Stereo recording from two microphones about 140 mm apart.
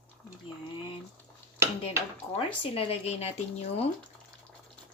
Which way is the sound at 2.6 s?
45° left (ahead or behind).